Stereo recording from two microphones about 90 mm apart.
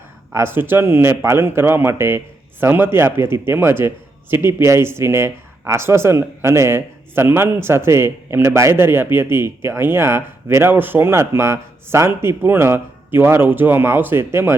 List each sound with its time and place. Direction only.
0.3 s speech: 25° right (ahead or behind)